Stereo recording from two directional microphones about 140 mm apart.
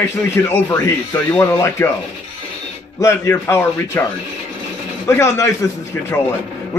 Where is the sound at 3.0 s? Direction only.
20° left (ahead or behind).